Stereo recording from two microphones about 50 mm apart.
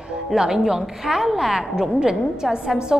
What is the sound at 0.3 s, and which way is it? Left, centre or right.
A woman's voice, centre.